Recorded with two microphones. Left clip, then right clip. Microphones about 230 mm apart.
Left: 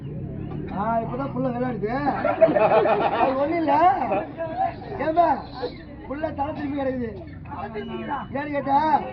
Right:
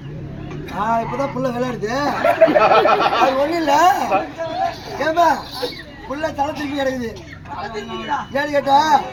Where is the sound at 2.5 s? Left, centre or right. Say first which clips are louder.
Right 6 dB; right.